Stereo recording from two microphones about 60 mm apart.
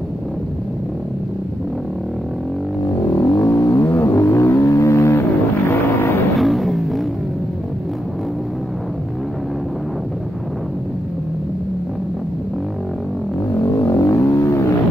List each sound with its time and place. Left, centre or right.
3.2 s vehicle: left
5.7 s vehicle: left
6.4 s vehicle: centre
13.5 s vehicle: left